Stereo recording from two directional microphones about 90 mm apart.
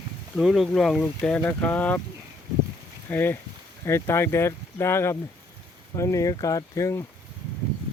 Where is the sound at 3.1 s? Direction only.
20° left (ahead or behind).